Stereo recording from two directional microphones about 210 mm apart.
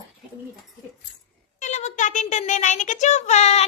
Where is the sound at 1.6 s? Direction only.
35° left (ahead or behind).